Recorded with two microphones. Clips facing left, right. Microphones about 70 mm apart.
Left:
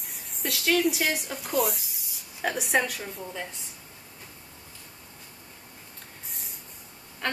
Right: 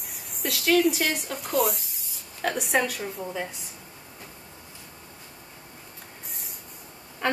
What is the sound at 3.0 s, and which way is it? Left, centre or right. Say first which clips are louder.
Speech: right 4 dB; centre.